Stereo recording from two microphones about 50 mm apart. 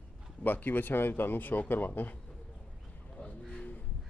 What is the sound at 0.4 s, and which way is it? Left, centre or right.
Speech, left.